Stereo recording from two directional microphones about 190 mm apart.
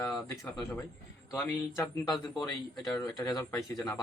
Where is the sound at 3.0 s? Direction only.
20° left (ahead or behind).